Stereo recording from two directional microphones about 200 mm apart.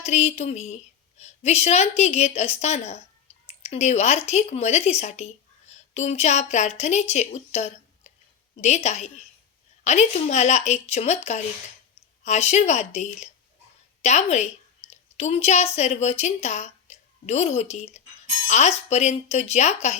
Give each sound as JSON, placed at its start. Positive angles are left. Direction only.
{"t": 0.0, "sound": "a woman's voice", "side_deg": 35}
{"t": 3.4, "sound": "a sound", "side_deg": 30}
{"t": 4.3, "sound": "a woman's voice", "side_deg": 35}